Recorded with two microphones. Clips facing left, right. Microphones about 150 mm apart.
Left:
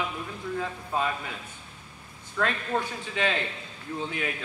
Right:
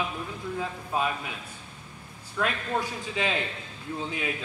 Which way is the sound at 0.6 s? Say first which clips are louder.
Right 1 dB; 15° right (ahead or behind).